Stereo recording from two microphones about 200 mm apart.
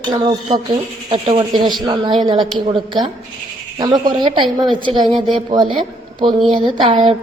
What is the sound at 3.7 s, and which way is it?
Speech, 20° right (ahead or behind).